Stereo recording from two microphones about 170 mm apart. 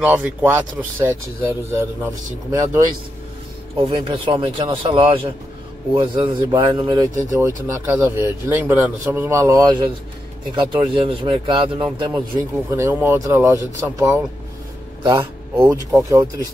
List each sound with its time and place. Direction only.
0.0 s speech: 10° right (ahead or behind)
3.7 s speech: 30° right (ahead or behind)
12.7 s speech: 15° right (ahead or behind)